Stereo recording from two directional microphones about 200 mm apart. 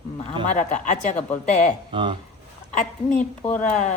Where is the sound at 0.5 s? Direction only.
40° left (ahead or behind).